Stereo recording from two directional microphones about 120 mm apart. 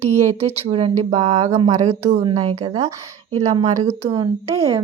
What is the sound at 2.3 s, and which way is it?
Speech, 40° right (ahead or behind).